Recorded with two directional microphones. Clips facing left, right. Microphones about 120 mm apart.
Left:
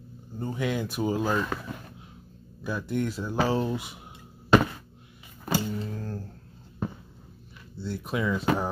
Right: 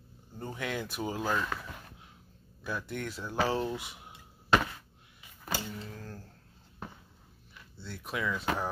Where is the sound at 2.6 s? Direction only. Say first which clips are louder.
Left 7 dB; 15° left (ahead or behind).